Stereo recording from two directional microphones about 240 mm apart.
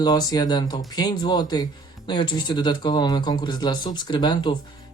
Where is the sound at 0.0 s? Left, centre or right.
Centre.